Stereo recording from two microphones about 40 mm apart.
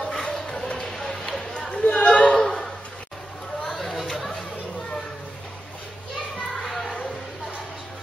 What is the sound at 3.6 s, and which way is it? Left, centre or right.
Chatter, centre.